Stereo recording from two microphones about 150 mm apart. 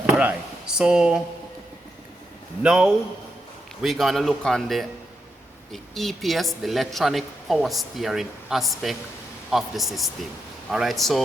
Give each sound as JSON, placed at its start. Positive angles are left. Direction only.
{"t": 0.0, "sound": "a sound", "side_deg": -10}
{"t": 0.8, "sound": "a woman's voice", "side_deg": -5}
{"t": 2.6, "sound": "a woman's voice", "side_deg": -5}